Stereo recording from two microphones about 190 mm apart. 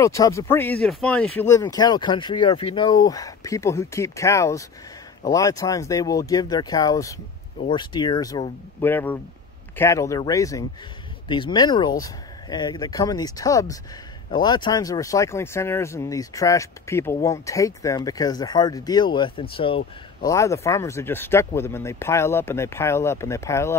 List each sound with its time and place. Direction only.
0.0 s speech: 15° left (ahead or behind)
1.5 s speech: 20° left (ahead or behind)
20.2 s speech: 15° left (ahead or behind)